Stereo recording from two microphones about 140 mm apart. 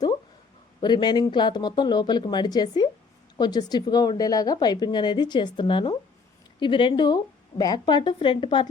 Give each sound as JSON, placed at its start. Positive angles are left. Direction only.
{"t": 0.8, "sound": "a woman's voice", "side_deg": 30}